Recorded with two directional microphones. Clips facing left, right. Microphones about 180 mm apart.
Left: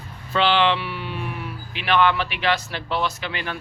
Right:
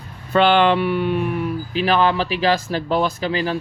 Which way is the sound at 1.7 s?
40° right (ahead or behind).